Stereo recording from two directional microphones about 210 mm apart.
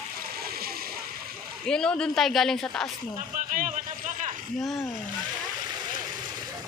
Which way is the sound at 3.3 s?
40° right (ahead or behind).